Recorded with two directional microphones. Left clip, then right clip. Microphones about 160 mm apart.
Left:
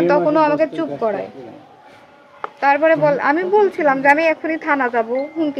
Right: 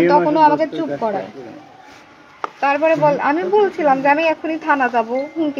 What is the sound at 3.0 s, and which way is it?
Speech, 20° left (ahead or behind).